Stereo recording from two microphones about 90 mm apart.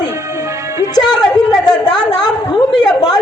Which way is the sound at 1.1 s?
50° left (ahead or behind).